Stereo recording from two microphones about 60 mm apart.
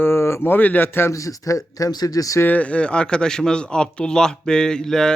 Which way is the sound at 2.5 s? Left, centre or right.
Left.